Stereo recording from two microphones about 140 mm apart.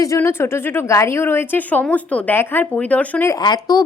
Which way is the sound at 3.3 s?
30° left (ahead or behind).